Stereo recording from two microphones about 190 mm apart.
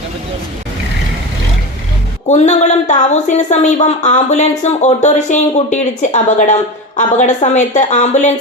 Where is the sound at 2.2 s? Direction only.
40° left (ahead or behind).